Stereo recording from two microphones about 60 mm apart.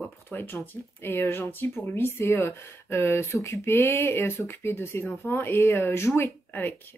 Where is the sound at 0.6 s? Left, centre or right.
Left.